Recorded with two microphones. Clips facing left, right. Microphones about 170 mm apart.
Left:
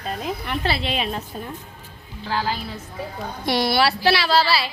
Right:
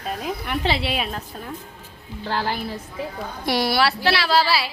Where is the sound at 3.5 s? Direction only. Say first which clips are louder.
Left 1 dB; 5° right (ahead or behind).